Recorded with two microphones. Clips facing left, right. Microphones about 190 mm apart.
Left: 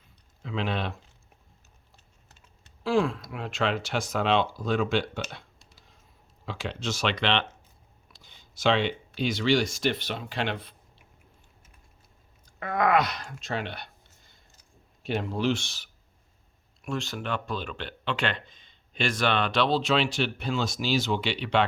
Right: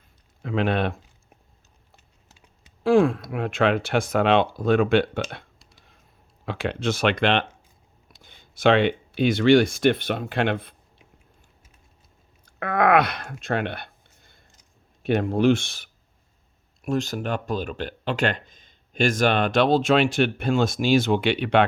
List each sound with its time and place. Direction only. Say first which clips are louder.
0.4 s speech: right 7 dB; 55° right (ahead or behind)
2.8 s speech: right 7 dB; 55° right (ahead or behind)
12.5 s a sound: right 5 dB; 65° right (ahead or behind)
15.0 s speech: right 8 dB; 55° right (ahead or behind)
16.8 s speech: right 7 dB; 40° right (ahead or behind)